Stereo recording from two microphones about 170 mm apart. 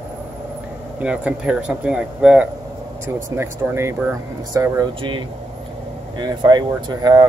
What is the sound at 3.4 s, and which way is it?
Speech, 15° right (ahead or behind).